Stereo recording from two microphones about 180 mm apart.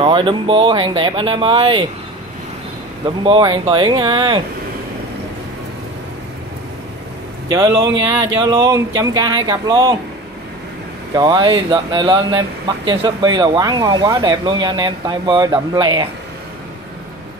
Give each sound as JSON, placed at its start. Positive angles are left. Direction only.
{"t": 0.0, "sound": "speech", "side_deg": -30}
{"t": 3.3, "sound": "speech", "side_deg": -25}
{"t": 7.4, "sound": "speech", "side_deg": -20}
{"t": 11.1, "sound": "speech", "side_deg": -25}